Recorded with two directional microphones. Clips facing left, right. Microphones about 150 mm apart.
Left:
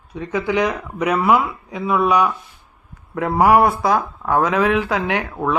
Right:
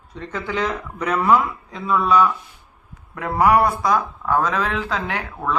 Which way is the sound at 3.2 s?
25° left (ahead or behind).